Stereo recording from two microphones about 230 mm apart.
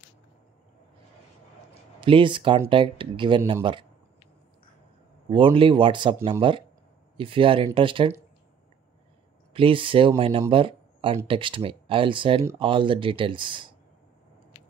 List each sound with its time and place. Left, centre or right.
2.0 s speech: right
5.3 s speech: right
9.5 s speech: right